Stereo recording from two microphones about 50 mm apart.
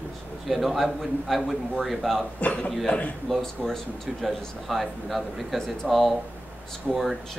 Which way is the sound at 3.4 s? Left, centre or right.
Centre.